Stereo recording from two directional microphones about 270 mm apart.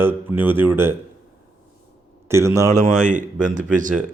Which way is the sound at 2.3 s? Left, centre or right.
Centre.